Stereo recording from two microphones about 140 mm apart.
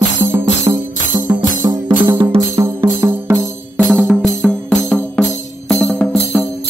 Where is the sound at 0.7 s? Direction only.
35° right (ahead or behind).